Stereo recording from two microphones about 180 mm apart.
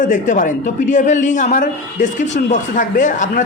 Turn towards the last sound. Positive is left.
turn(degrees=45)  # may be behind; listen again after turning